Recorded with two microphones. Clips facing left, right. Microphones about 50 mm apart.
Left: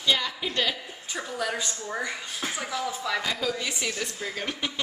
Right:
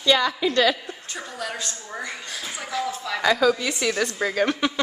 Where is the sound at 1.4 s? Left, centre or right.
Centre.